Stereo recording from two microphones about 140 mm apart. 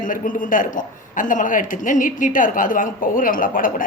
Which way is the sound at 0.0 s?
70° left (ahead or behind).